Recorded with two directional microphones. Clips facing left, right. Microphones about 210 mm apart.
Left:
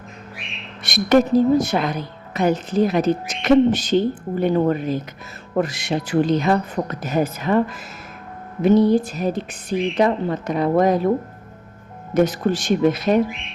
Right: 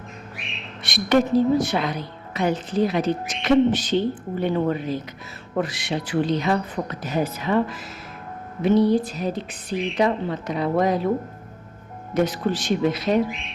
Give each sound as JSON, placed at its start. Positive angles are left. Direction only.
{"t": 0.8, "sound": "a woman's voice", "side_deg": 45}
{"t": 12.1, "sound": "a woman's voice", "side_deg": 45}